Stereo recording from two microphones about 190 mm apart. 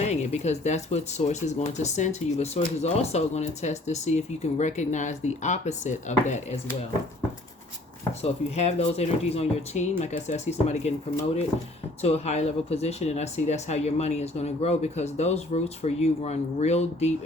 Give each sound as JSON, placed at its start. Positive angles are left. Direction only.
{"t": 0.0, "sound": "speech", "side_deg": 35}
{"t": 8.2, "sound": "speech", "side_deg": 35}
{"t": 12.0, "sound": "speech", "side_deg": 35}